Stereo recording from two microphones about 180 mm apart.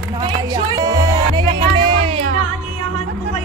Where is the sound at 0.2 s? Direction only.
25° right (ahead or behind).